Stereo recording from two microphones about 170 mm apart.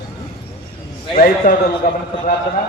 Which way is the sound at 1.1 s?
55° left (ahead or behind).